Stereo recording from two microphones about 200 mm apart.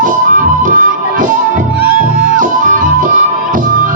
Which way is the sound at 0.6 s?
40° right (ahead or behind).